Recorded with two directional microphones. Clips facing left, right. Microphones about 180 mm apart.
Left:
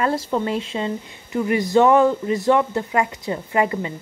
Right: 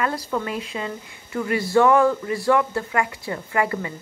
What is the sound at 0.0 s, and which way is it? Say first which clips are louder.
A woman's voice: left 4 dB; 25° left (ahead or behind).